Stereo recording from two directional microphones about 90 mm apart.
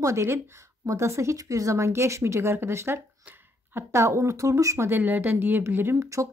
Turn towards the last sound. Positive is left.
turn(degrees=-25)  # may be behind; listen again after turning